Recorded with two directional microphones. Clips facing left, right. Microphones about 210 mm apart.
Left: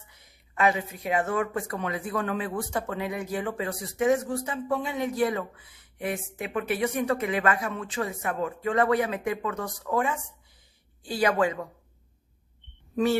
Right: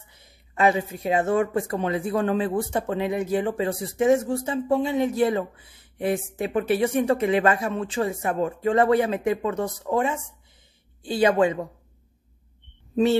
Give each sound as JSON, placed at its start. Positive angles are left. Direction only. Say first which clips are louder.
{"t": 0.6, "sound": "speech", "louder": "right 4 dB", "side_deg": -30}